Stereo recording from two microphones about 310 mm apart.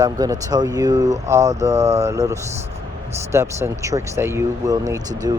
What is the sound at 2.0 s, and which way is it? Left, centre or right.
Speech, centre.